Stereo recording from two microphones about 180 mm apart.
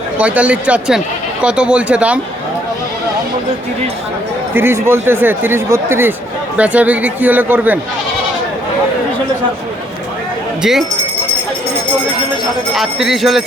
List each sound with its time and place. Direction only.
0.2 s speech: 5° right (ahead or behind)
4.5 s speech: 15° right (ahead or behind)
10.6 s speech: centre (ahead or behind)
12.7 s speech: centre (ahead or behind)